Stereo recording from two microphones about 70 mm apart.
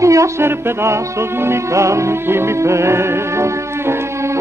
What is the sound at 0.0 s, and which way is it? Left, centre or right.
Music, right.